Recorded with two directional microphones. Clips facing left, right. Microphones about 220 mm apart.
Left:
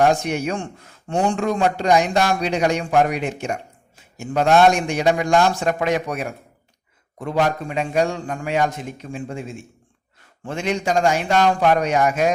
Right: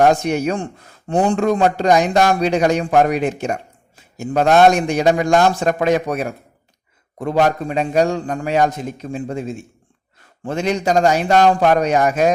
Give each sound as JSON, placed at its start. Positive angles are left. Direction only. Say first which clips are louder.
{"t": 0.0, "sound": "a man's voice", "louder": "right 3 dB", "side_deg": -40}